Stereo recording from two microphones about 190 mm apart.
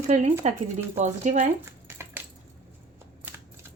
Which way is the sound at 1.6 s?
10° right (ahead or behind).